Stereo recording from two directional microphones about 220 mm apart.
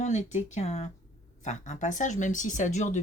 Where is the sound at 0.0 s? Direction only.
35° left (ahead or behind).